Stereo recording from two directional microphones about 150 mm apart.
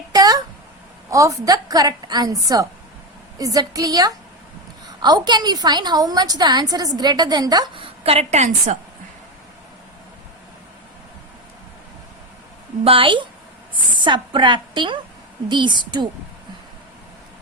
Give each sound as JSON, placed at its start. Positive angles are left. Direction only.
{"t": 0.1, "sound": "a sound", "side_deg": -25}
{"t": 1.1, "sound": "a woman's voice", "side_deg": -25}
{"t": 8.0, "sound": "a woman's voice", "side_deg": -45}
{"t": 12.8, "sound": "a woman's voice", "side_deg": -35}